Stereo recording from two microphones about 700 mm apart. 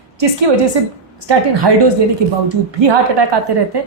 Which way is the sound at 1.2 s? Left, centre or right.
Right.